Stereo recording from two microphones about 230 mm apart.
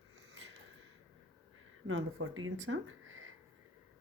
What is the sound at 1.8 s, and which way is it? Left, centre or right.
Speech, right.